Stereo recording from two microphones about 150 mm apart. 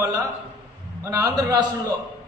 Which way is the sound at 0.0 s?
25° right (ahead or behind).